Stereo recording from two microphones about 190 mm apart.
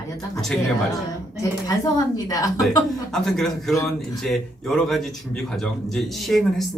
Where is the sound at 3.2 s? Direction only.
Centre (ahead or behind).